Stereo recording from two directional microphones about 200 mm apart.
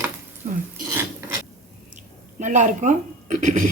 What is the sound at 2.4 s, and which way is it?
Speech, 40° right (ahead or behind).